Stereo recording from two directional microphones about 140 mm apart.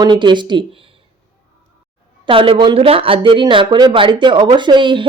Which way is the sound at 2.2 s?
40° right (ahead or behind).